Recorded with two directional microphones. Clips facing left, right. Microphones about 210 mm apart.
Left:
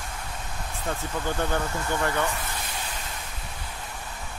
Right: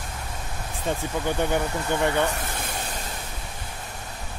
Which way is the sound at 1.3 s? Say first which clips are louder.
Right 3 dB; 15° right (ahead or behind).